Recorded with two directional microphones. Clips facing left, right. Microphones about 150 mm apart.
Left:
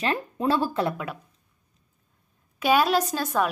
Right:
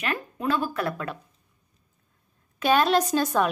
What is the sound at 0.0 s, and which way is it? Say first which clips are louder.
Speech: left 3 dB; 30° left (ahead or behind).